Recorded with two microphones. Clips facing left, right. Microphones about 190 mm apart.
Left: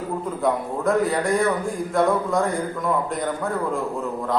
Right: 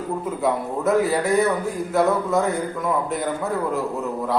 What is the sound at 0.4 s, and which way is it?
A man's voice, 5° right (ahead or behind).